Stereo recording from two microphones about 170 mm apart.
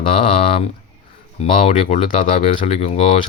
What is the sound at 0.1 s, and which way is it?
Speech, 35° left (ahead or behind).